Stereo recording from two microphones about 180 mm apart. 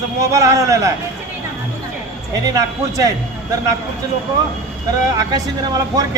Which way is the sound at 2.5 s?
20° right (ahead or behind).